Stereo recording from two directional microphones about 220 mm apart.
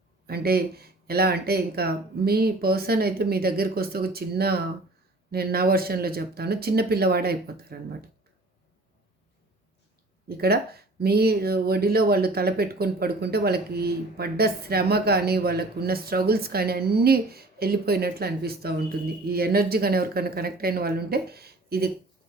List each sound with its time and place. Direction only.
0.3 s speech: 45° right (ahead or behind)
10.2 s speech: 45° right (ahead or behind)